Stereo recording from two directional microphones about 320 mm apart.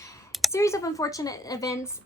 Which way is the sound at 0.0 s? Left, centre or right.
Centre.